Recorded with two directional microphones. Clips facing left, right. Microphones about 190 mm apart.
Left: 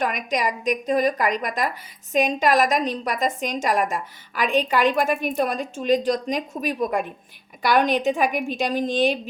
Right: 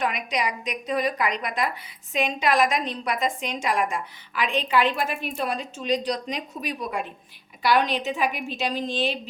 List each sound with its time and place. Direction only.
0.0 s a woman's voice: 45° left (ahead or behind)